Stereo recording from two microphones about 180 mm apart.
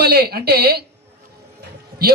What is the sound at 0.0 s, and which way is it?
Speech, 65° right (ahead or behind).